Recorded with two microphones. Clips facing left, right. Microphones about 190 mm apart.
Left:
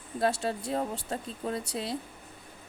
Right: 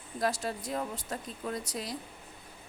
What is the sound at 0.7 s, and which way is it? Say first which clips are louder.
Speech: left 4 dB; 30° left (ahead or behind).